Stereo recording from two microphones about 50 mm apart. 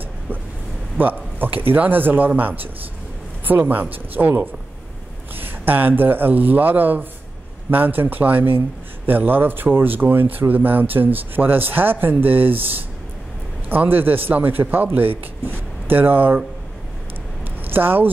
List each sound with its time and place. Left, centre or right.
0.9 s a man's voice: right
17.6 s speech: right